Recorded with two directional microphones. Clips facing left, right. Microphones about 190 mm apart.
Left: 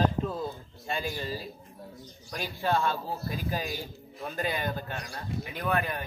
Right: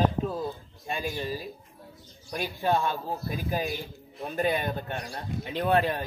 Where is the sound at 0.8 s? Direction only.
15° right (ahead or behind).